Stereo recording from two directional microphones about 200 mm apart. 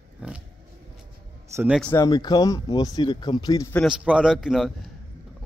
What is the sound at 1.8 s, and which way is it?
Speech, 20° left (ahead or behind).